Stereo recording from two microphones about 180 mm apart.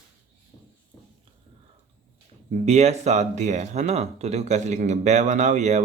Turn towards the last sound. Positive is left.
turn(degrees=-40)  # may be behind; listen again after turning